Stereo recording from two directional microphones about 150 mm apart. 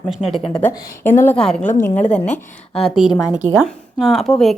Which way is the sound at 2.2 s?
50° left (ahead or behind).